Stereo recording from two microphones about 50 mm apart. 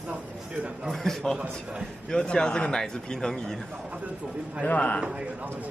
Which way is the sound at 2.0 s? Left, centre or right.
Centre.